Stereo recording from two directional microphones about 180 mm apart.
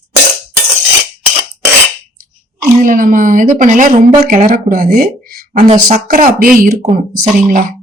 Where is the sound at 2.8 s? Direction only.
50° right (ahead or behind).